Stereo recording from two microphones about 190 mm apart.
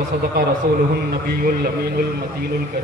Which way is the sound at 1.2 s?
50° right (ahead or behind).